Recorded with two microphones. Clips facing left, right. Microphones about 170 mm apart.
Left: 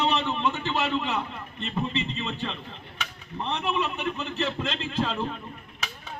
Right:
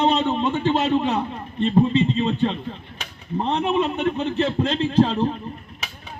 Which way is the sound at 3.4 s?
55° right (ahead or behind).